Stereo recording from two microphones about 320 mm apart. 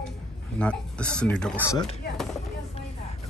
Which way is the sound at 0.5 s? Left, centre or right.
Centre.